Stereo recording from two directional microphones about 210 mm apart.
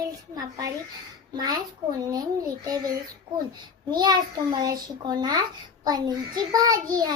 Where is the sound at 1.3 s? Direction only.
20° right (ahead or behind).